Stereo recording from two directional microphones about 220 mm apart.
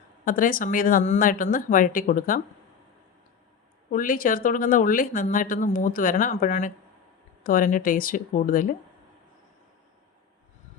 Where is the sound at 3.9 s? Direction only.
40° left (ahead or behind).